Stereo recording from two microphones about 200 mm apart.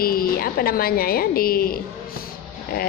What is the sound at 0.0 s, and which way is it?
A woman's voice, 45° left (ahead or behind).